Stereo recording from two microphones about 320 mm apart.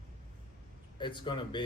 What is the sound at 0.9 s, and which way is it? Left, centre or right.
Speech, centre.